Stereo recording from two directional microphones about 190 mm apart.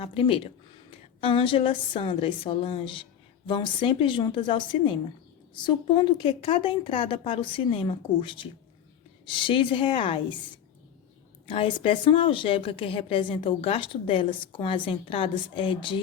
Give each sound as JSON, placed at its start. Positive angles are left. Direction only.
{"t": 0.0, "sound": "a woman's voice", "side_deg": 30}
{"t": 11.4, "sound": "a woman's voice", "side_deg": 30}